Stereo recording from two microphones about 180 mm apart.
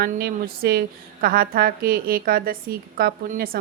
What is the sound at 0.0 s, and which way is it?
A woman's voice, 55° right (ahead or behind).